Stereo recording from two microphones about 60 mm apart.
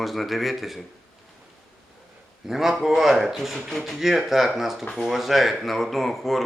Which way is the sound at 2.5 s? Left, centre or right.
Centre.